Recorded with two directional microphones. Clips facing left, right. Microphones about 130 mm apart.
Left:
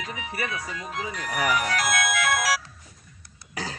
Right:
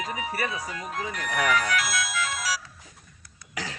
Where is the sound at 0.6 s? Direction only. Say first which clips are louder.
Even; 10° right (ahead or behind).